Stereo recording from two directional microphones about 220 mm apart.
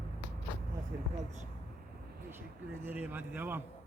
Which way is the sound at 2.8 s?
10° right (ahead or behind).